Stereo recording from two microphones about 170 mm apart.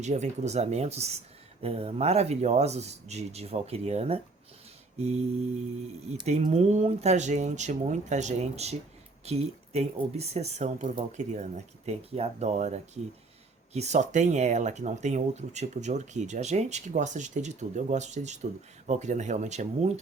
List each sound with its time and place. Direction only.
0.0 s speech: 40° right (ahead or behind)